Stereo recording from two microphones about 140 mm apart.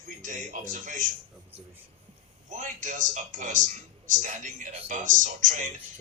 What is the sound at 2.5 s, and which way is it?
A man's voice, 65° right (ahead or behind).